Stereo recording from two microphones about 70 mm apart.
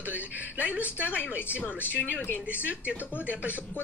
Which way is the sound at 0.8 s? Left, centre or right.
Left.